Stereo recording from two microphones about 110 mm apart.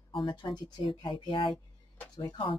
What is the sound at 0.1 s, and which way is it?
Speech, 45° left (ahead or behind).